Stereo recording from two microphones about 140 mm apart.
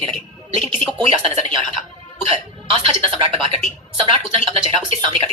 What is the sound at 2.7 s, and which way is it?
Speech, 45° right (ahead or behind).